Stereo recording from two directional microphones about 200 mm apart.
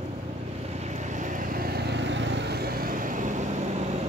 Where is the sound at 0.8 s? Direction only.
35° right (ahead or behind).